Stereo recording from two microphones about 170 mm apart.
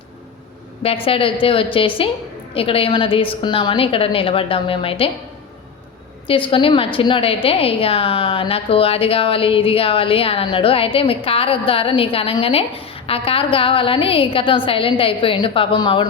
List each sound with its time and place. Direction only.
0.8 s a woman's voice: 35° left (ahead or behind)
6.2 s a woman's voice: 30° left (ahead or behind)